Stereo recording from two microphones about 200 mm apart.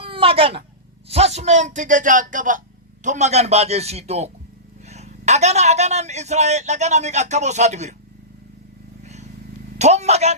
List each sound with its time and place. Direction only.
0.0 s a sound: 25° right (ahead or behind)
1.0 s a man's voice: 30° right (ahead or behind)
9.7 s a man's voice: 35° right (ahead or behind)